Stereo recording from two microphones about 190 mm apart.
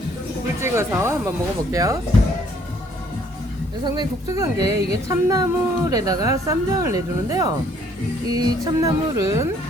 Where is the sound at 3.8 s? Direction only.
20° right (ahead or behind).